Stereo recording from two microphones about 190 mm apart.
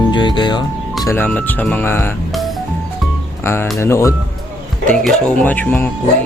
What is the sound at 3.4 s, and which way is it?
Speech, 10° left (ahead or behind).